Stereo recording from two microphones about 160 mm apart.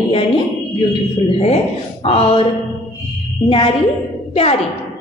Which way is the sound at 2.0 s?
40° left (ahead or behind).